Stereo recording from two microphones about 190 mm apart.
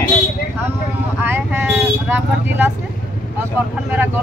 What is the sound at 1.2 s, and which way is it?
Speech, 10° right (ahead or behind).